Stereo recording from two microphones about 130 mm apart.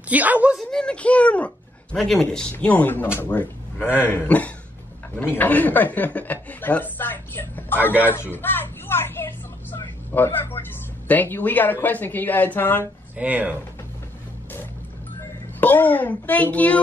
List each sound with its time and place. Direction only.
0.1 s speech: 10° right (ahead or behind)
0.6 s speech: 5° left (ahead or behind)
13.1 s speech: 10° right (ahead or behind)
15.6 s speech: 15° left (ahead or behind)